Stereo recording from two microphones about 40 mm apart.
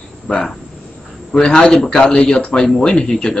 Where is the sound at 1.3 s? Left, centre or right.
Centre.